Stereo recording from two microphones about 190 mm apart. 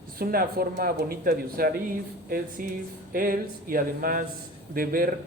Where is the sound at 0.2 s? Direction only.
50° right (ahead or behind).